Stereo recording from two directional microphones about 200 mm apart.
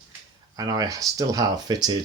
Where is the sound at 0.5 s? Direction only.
20° right (ahead or behind).